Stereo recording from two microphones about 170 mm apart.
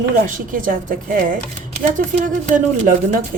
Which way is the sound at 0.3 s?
50° right (ahead or behind).